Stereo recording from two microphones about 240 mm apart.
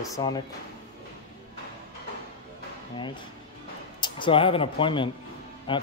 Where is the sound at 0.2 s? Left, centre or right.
Centre.